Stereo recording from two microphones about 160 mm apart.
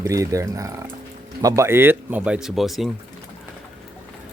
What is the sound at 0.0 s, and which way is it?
Speech, 20° right (ahead or behind).